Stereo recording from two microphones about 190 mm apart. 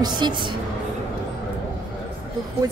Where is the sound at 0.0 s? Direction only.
25° right (ahead or behind).